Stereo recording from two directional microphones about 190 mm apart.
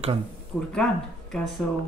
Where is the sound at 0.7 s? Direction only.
5° left (ahead or behind).